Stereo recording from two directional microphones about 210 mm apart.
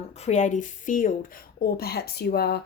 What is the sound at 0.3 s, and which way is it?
Speech, 35° left (ahead or behind).